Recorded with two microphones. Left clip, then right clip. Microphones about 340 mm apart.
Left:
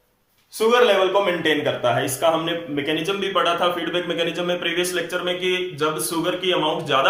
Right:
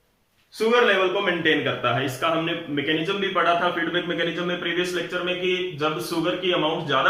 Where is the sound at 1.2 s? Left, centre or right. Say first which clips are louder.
Left 1 dB; centre.